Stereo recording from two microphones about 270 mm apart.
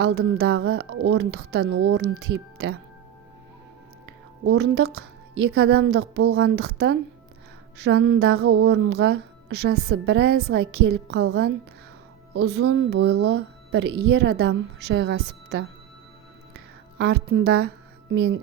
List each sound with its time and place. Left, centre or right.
0.0 s speech: right
4.0 s speech: right
17.0 s speech: right